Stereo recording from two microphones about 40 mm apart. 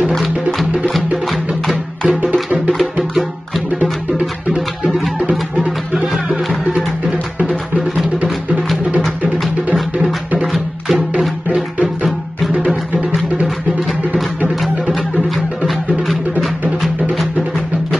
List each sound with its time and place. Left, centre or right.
0.2 s music: centre
7.4 s music: centre
10.4 s music: centre
11.5 s music: centre
14.5 s music: centre